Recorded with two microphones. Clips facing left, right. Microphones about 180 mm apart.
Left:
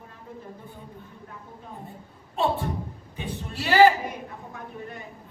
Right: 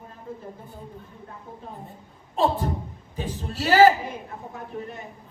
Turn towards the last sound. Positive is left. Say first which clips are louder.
# right 1 dB
turn(degrees=-40)  # may be behind; listen again after turning